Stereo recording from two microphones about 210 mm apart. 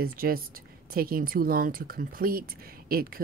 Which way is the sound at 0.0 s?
45° right (ahead or behind).